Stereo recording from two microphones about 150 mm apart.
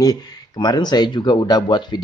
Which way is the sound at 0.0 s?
25° left (ahead or behind).